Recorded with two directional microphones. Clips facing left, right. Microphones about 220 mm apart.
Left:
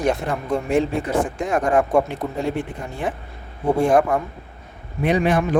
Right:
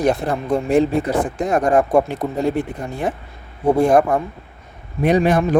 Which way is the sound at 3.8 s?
40° right (ahead or behind).